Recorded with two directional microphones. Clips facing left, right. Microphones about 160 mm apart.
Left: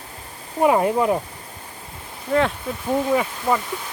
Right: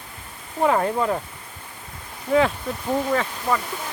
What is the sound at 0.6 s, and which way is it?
Speech, 15° left (ahead or behind).